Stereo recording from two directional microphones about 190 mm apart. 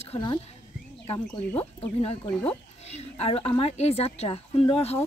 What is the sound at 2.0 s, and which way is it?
A woman's voice, 35° left (ahead or behind).